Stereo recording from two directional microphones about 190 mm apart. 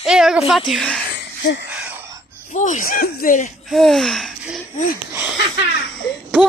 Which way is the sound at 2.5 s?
40° left (ahead or behind).